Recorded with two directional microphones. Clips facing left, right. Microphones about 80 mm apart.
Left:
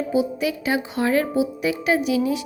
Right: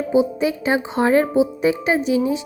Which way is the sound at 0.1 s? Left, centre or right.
Right.